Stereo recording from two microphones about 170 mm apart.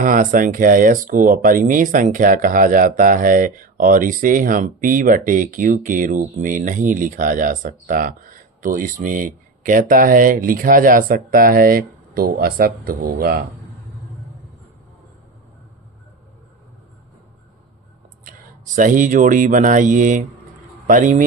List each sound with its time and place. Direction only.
0.0 s speech: 50° right (ahead or behind)
18.8 s speech: 50° right (ahead or behind)